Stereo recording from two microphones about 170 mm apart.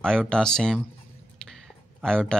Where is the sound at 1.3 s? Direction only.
5° left (ahead or behind).